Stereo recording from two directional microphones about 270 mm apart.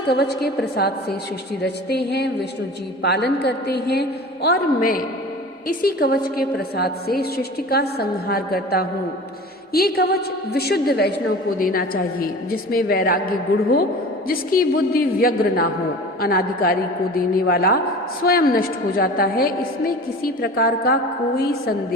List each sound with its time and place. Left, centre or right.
0.1 s a woman's voice: left